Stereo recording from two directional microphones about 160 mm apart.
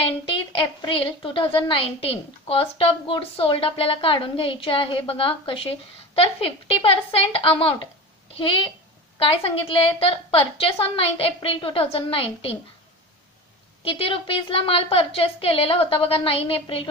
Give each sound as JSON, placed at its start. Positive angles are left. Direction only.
{"t": 0.0, "sound": "a woman's voice", "side_deg": 35}
{"t": 13.8, "sound": "a woman's voice", "side_deg": 35}